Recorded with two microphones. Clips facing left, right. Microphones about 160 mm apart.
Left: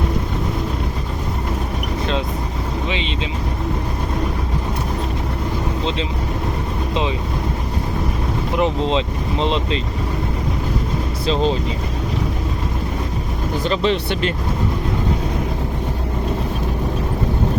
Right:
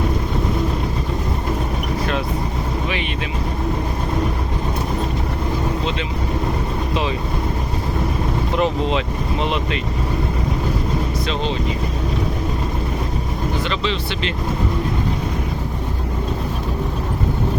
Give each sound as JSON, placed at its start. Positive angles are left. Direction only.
{"t": 8.5, "sound": "speech", "side_deg": 20}
{"t": 13.7, "sound": "speech", "side_deg": 45}